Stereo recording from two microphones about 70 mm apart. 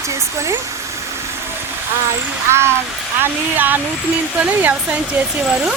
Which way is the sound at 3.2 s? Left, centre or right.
Right.